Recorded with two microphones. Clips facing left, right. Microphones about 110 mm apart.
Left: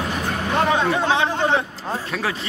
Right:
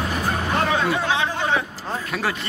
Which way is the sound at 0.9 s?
20° left (ahead or behind).